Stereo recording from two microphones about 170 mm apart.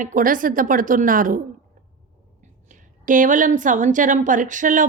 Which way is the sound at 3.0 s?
50° right (ahead or behind).